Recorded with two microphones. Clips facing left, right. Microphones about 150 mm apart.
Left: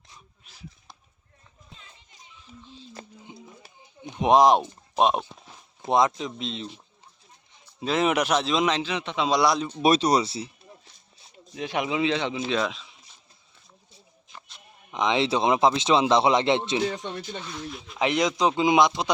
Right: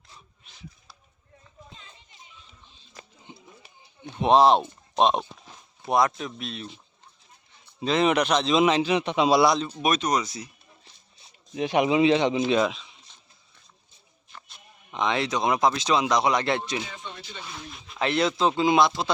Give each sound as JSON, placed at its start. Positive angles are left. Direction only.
{"t": 3.3, "sound": "music", "side_deg": 15}
{"t": 4.0, "sound": "speech", "side_deg": 15}
{"t": 5.9, "sound": "speech", "side_deg": 20}
{"t": 7.8, "sound": "a man's voice", "side_deg": 5}
{"t": 8.5, "sound": "speech", "side_deg": -10}
{"t": 9.4, "sound": "speech", "side_deg": 0}
{"t": 9.8, "sound": "speech", "side_deg": 35}
{"t": 11.5, "sound": "speech", "side_deg": -20}
{"t": 14.9, "sound": "speech", "side_deg": 20}
{"t": 17.4, "sound": "speech", "side_deg": -5}
{"t": 18.0, "sound": "a man's voice", "side_deg": 15}